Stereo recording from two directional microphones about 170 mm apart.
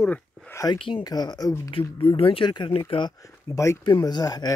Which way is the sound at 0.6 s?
30° left (ahead or behind).